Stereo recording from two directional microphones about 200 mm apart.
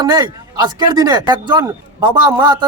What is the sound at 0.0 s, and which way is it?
Speech, 20° right (ahead or behind).